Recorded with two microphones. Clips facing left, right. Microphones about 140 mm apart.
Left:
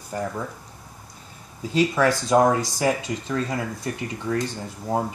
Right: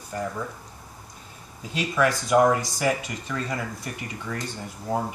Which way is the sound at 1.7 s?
30° left (ahead or behind).